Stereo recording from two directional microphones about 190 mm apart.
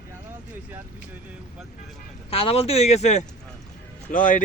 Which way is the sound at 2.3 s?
30° left (ahead or behind).